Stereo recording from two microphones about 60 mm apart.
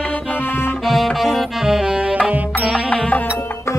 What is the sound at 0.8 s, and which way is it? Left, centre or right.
Music, centre.